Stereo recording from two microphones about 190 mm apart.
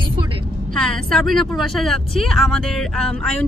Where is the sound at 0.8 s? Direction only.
5° left (ahead or behind).